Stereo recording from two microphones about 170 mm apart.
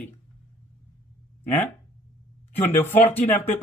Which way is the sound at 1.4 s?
10° left (ahead or behind).